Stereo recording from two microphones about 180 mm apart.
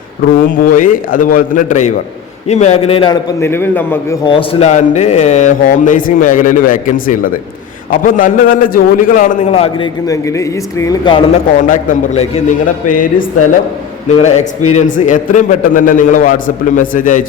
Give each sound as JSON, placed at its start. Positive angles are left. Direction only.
{"t": 0.3, "sound": "a man's voice", "side_deg": 50}
{"t": 4.2, "sound": "a man's voice", "side_deg": 30}
{"t": 4.7, "sound": "a man's voice", "side_deg": 40}
{"t": 11.7, "sound": "a man's voice", "side_deg": 40}